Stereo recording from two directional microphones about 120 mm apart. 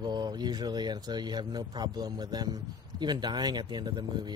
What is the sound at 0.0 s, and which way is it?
Speech, 35° right (ahead or behind).